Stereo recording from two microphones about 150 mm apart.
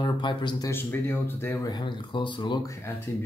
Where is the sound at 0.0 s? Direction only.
30° left (ahead or behind).